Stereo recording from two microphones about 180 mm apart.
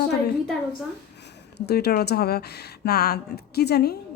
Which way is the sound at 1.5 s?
65° left (ahead or behind).